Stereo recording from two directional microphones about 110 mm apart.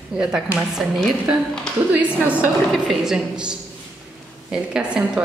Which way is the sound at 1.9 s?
15° right (ahead or behind).